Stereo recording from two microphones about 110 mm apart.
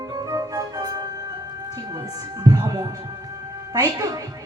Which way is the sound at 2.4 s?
35° right (ahead or behind).